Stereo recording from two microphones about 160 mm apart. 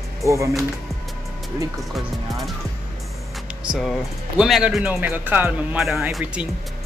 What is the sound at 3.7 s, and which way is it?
Speech, centre (ahead or behind).